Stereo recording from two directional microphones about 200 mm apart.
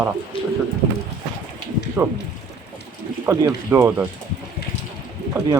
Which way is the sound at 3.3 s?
15° right (ahead or behind).